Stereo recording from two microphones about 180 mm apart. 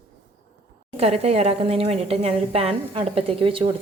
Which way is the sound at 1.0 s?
35° right (ahead or behind).